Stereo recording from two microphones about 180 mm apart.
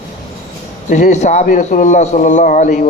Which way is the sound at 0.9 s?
40° left (ahead or behind).